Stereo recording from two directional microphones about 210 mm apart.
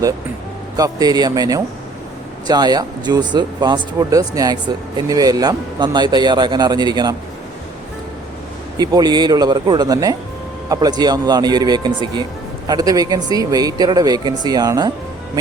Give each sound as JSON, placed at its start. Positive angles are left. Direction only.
{"t": 0.8, "sound": "a man's voice", "side_deg": -15}
{"t": 8.8, "sound": "speech", "side_deg": -20}